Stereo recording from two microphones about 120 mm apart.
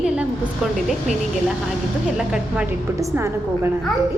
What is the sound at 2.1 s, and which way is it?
Speech, 5° right (ahead or behind).